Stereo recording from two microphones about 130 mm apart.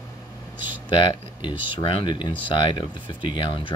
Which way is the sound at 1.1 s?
40° left (ahead or behind).